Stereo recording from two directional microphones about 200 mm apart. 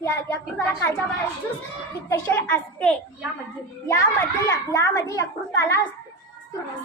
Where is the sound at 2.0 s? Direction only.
10° left (ahead or behind).